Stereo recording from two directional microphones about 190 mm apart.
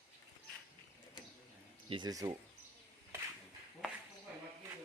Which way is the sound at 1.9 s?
25° right (ahead or behind).